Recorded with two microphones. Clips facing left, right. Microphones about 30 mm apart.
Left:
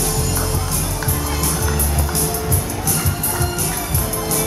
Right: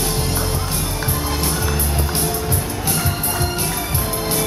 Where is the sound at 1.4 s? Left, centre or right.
Right.